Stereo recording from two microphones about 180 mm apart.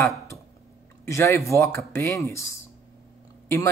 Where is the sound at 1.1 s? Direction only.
15° left (ahead or behind).